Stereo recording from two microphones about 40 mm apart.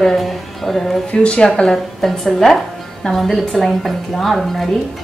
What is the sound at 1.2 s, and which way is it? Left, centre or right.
Speech, left.